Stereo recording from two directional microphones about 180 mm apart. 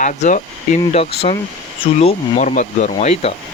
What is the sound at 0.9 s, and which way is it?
Speech, 35° left (ahead or behind).